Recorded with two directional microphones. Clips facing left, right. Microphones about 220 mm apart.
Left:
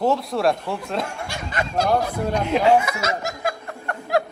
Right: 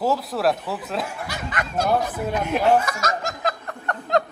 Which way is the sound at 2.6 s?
10° left (ahead or behind).